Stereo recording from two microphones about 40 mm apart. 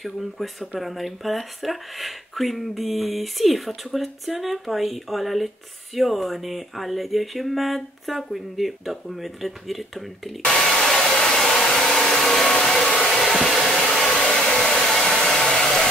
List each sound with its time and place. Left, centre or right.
0.0 s speech: centre
10.4 s hair dryer: centre